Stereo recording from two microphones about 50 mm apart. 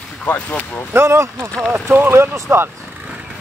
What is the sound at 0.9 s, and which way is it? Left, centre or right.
Speech, right.